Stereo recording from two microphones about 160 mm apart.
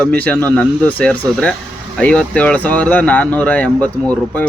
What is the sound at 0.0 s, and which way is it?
Speech, 10° left (ahead or behind).